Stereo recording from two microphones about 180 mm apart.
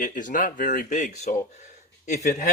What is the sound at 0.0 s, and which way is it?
Speech, 45° left (ahead or behind).